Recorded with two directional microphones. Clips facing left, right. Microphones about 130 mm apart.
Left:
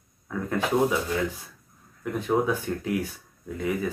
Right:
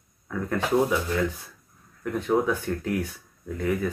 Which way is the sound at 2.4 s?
15° left (ahead or behind).